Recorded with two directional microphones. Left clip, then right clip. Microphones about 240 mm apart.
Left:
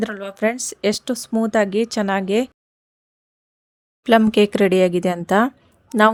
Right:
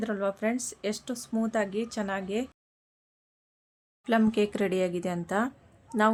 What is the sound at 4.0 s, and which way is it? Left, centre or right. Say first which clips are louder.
Speech: left 11 dB; left.